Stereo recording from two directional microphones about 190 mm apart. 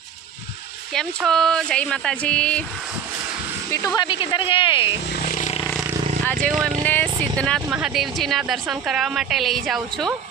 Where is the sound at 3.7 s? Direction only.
20° left (ahead or behind).